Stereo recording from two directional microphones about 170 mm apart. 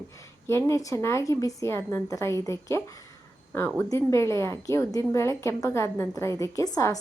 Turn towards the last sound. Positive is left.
turn(degrees=20)  # may be behind; listen again after turning